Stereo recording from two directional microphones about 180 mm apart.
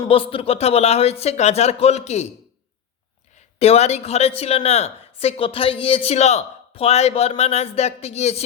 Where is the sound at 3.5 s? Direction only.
35° left (ahead or behind).